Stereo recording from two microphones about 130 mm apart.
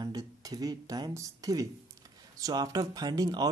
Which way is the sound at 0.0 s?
30° right (ahead or behind).